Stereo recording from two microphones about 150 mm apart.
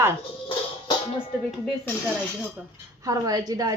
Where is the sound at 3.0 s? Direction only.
25° right (ahead or behind).